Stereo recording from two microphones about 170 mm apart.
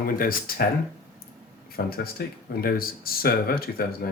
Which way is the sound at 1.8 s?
65° left (ahead or behind).